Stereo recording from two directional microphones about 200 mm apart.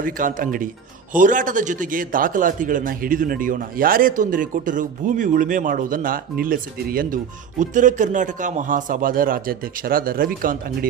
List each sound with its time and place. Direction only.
0.0 s a man's voice: 40° right (ahead or behind)